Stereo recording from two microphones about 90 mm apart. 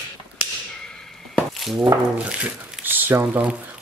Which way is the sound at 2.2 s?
15° right (ahead or behind).